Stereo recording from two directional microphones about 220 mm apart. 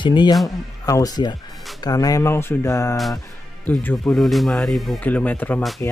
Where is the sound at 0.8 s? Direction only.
15° left (ahead or behind).